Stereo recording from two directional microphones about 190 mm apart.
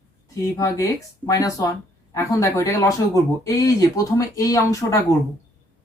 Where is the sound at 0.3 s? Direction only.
15° left (ahead or behind).